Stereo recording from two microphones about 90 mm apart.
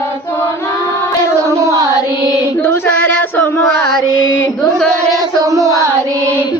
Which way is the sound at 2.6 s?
25° left (ahead or behind).